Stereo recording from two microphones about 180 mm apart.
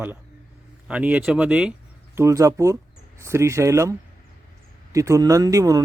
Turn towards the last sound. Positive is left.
turn(degrees=-20)  # may be behind; listen again after turning